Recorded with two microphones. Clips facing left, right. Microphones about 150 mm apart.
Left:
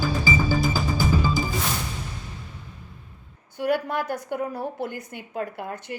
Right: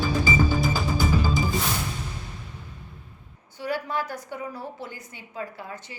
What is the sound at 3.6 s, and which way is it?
A woman's voice, 55° left (ahead or behind).